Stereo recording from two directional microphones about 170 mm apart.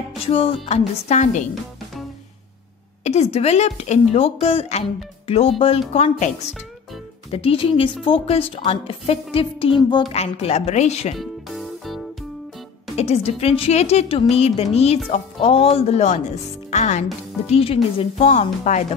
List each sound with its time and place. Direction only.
0.3 s a woman's voice: 35° left (ahead or behind)
3.0 s a woman's voice: 40° left (ahead or behind)
10.1 s a woman's voice: 35° left (ahead or behind)
11.1 s music: centre (ahead or behind)
12.9 s a woman's voice: 40° left (ahead or behind)